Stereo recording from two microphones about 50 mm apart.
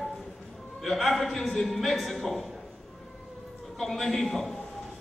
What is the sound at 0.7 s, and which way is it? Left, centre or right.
A man's voice, centre.